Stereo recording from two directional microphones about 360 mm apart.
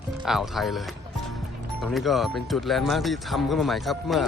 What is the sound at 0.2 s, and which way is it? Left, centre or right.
Speech, centre.